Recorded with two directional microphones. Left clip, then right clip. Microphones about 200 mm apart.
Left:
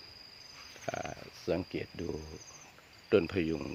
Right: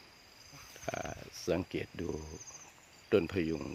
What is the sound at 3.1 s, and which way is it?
Speech, 5° right (ahead or behind).